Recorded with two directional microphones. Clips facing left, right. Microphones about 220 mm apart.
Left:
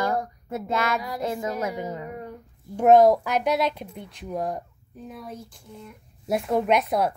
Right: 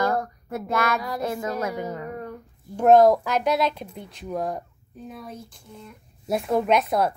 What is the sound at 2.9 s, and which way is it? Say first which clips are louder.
Speech: right 1 dB; 10° left (ahead or behind).